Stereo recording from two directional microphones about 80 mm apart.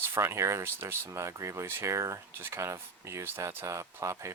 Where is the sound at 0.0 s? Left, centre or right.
Right.